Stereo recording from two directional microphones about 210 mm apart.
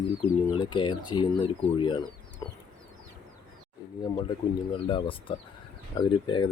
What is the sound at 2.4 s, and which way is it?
Chicken, 15° left (ahead or behind).